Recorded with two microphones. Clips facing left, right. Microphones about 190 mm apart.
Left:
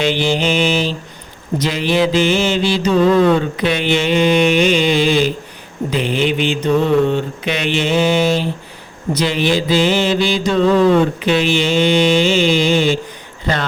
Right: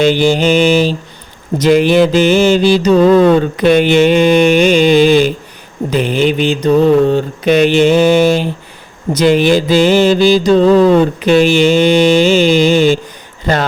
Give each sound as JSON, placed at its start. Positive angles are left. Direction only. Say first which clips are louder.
{"t": 0.0, "sound": "mantra", "louder": "right 6 dB", "side_deg": -45}